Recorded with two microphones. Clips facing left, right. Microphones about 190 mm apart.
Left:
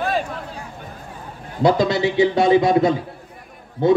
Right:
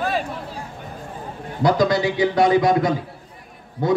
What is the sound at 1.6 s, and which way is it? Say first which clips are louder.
A man's voice: left 1 dB; 25° left (ahead or behind).